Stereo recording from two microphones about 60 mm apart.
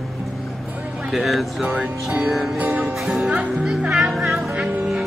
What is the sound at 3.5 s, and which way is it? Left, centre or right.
Music, centre.